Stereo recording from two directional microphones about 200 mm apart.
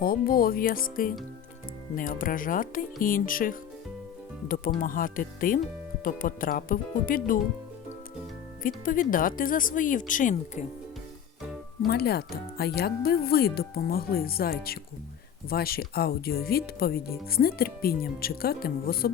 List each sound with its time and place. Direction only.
0.0 s speech: 45° left (ahead or behind)
8.6 s speech: 45° left (ahead or behind)
11.9 s speech: 50° left (ahead or behind)